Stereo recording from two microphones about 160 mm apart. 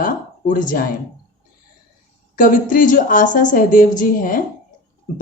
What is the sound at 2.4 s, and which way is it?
A woman's voice, 55° left (ahead or behind).